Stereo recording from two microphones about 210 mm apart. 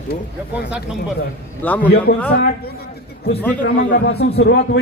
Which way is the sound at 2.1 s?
55° left (ahead or behind).